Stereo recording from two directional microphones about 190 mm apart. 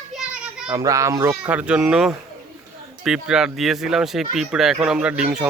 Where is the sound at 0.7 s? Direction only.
20° right (ahead or behind).